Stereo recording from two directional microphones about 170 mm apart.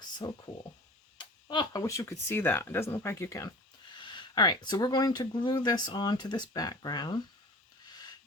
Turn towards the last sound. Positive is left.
turn(degrees=25)  # may be behind; listen again after turning